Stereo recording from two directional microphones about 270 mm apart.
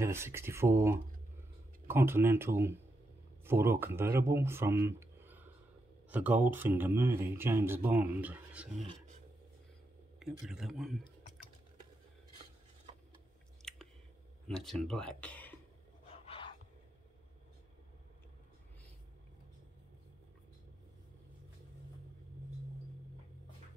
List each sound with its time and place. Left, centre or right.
0.0 s speech: centre
10.1 s a man's voice: centre
13.6 s chewing: centre
14.5 s speech: centre
16.1 s a sound: centre